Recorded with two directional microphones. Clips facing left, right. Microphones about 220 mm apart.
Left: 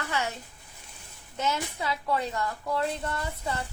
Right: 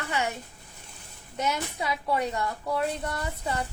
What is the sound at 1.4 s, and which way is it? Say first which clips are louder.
A woman's voice: right 1 dB; 15° right (ahead or behind).